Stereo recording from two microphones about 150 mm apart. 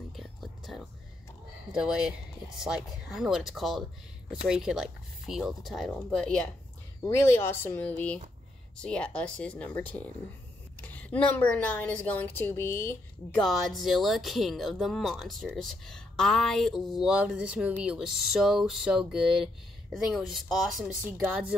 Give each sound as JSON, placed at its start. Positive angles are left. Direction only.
{"t": 0.1, "sound": "whispering", "side_deg": 0}
{"t": 1.7, "sound": "speech", "side_deg": -5}
{"t": 7.0, "sound": "a woman's voice", "side_deg": 15}
{"t": 13.4, "sound": "speech", "side_deg": 0}